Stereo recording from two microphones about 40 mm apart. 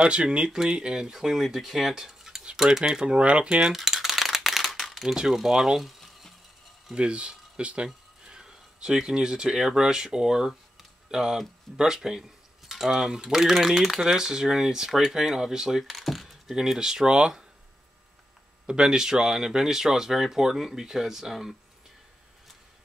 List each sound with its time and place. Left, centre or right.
0.0 s speech: right
3.7 s rattle: centre
5.0 s speech: centre
5.8 s a sound: centre
7.0 s a sound: right
9.6 s speech: centre
15.9 s typing: centre
16.7 s speech: centre
18.7 s speech: centre